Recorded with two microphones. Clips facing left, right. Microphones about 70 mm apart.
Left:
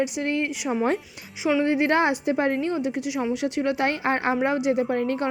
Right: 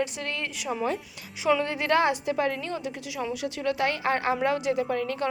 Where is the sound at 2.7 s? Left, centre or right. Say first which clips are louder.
Left 7 dB; left.